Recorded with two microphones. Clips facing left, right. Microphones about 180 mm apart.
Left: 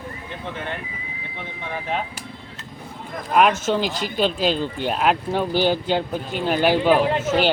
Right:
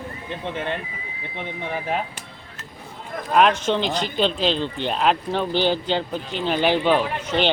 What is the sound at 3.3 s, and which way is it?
Speech, 5° left (ahead or behind).